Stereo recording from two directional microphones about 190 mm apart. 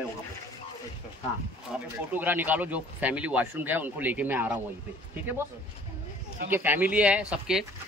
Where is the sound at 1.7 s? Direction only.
Centre (ahead or behind).